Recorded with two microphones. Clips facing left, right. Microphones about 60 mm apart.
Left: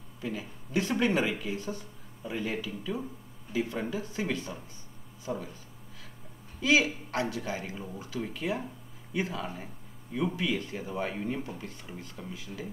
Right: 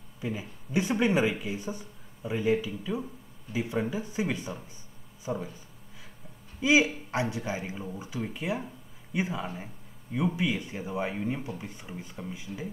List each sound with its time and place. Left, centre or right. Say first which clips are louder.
0.2 s speech: right 1 dB; centre
6.6 s speech: right 2 dB; centre